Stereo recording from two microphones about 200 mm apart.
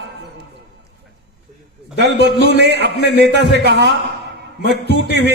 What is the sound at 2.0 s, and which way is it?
Speech, 60° right (ahead or behind).